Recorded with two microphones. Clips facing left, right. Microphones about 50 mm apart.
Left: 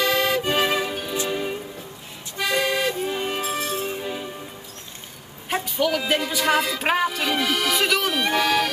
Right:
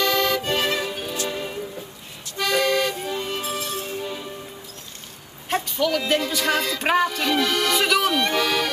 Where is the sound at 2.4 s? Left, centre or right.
Centre.